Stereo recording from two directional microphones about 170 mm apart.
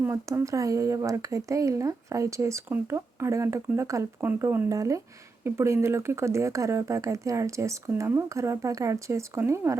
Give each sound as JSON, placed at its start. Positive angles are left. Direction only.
{"t": 0.0, "sound": "speech", "side_deg": -15}